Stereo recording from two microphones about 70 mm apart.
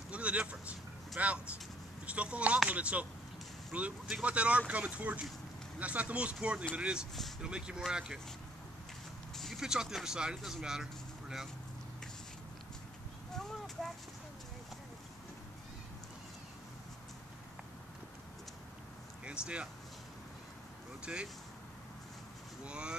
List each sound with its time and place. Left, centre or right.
0.1 s speech: centre
9.3 s a sound: centre
9.6 s speech: centre
13.4 s a sound: centre
19.2 s speech: centre
21.0 s speech: centre
22.7 s speech: centre